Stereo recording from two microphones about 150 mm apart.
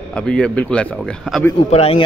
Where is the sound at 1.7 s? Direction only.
45° left (ahead or behind).